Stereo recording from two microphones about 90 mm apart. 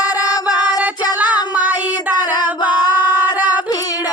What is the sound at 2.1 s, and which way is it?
Singing, 55° left (ahead or behind).